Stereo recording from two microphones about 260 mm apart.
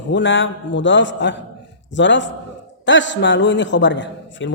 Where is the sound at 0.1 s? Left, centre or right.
Left.